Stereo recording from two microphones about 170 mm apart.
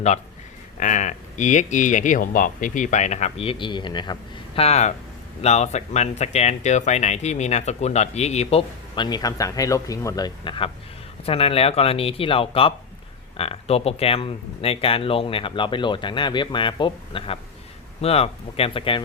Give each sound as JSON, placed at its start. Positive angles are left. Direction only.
{"t": 0.8, "sound": "speech", "side_deg": 45}